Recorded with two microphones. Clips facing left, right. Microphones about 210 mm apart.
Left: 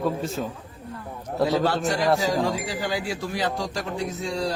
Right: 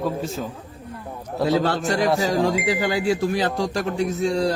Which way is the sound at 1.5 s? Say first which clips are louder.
Right 3 dB; 60° right (ahead or behind).